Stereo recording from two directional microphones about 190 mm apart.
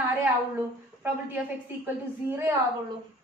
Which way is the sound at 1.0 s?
10° right (ahead or behind).